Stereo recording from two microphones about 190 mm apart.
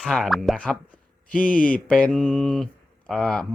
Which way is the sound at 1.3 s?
45° left (ahead or behind).